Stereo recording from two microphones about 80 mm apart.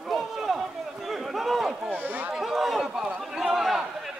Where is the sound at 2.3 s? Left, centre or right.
Centre.